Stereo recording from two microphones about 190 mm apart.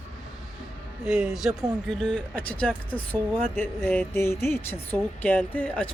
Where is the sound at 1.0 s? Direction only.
5° right (ahead or behind).